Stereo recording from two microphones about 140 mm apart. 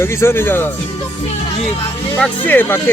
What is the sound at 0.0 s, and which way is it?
Speech, 20° left (ahead or behind).